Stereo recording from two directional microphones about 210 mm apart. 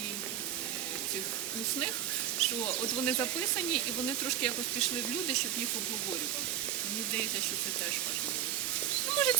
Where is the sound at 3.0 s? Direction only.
5° left (ahead or behind).